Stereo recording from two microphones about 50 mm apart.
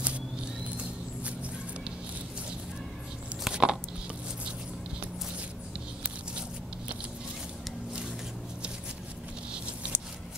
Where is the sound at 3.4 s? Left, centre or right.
Centre.